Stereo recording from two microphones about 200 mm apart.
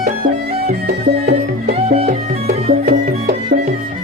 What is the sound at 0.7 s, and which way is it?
Music, 50° right (ahead or behind).